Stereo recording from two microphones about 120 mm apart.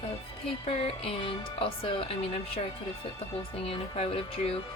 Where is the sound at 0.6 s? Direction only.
55° left (ahead or behind).